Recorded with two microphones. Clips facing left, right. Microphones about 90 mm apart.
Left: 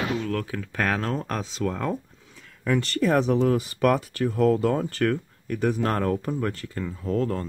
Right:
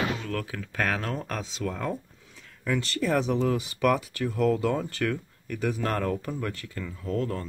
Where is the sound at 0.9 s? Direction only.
30° left (ahead or behind).